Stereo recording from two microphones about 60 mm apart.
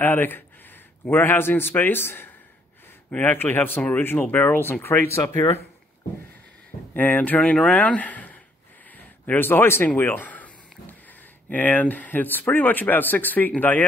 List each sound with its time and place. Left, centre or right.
0.0 s a man's voice: left
4.8 s speech: left
6.9 s speech: left
7.4 s speech: centre
8.9 s a sound: left
11.4 s speech: left